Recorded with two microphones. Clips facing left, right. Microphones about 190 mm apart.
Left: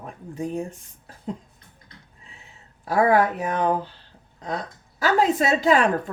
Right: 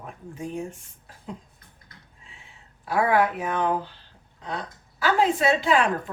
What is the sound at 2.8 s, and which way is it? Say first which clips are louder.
A woman's voice: left 3 dB; 40° left (ahead or behind).